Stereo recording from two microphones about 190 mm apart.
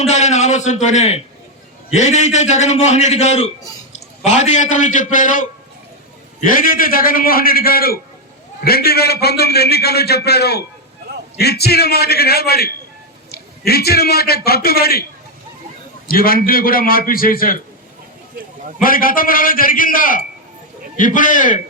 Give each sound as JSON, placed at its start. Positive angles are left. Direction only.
{"t": 0.0, "sound": "a man's voice", "side_deg": 35}
{"t": 16.0, "sound": "a man's voice", "side_deg": 50}
{"t": 18.8, "sound": "a man's voice", "side_deg": 50}